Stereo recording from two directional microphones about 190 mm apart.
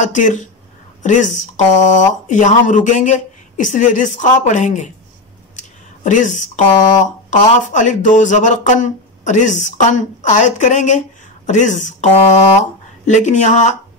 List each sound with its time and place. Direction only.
0.0 s speech: 40° left (ahead or behind)
5.6 s a sound: 40° left (ahead or behind)
7.0 s speech: 40° left (ahead or behind)